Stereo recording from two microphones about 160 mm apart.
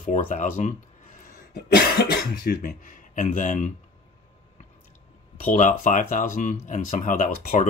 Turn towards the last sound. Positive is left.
turn(degrees=55)  # may be behind; listen again after turning